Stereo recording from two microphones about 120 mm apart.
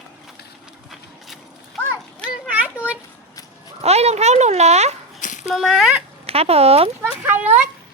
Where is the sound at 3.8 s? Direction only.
60° right (ahead or behind).